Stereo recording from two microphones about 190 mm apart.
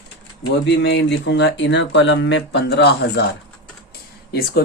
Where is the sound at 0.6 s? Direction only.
65° left (ahead or behind).